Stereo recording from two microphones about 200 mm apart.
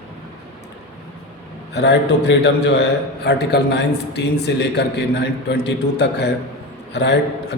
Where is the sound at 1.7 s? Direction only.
60° left (ahead or behind).